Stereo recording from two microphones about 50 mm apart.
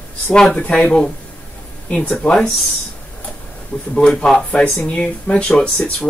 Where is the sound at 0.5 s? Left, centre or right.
Left.